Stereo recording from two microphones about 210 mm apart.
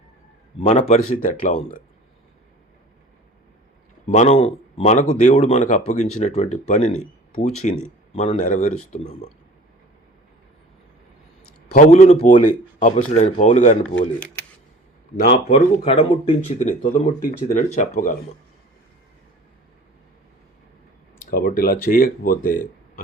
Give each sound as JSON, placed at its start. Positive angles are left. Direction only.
{"t": 0.6, "sound": "a man's voice", "side_deg": 30}
{"t": 1.1, "sound": "speech", "side_deg": 40}
{"t": 4.1, "sound": "speech", "side_deg": 30}
{"t": 11.7, "sound": "speech", "side_deg": 35}
{"t": 15.4, "sound": "speech", "side_deg": 25}
{"t": 21.2, "sound": "speech", "side_deg": 45}